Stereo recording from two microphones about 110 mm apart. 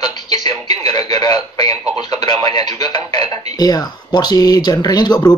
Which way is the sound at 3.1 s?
70° right (ahead or behind).